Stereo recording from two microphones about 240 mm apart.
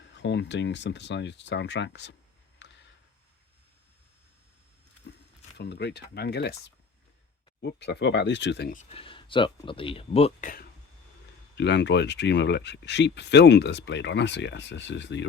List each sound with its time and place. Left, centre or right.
0.1 s speech: left
2.6 s a sound: left
5.5 s speech: left
7.6 s speech: left
8.9 s speech: left
11.5 s speech: left